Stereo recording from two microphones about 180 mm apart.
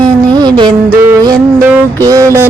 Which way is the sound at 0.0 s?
25° right (ahead or behind).